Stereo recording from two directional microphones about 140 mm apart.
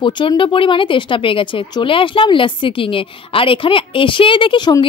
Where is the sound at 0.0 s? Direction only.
35° left (ahead or behind).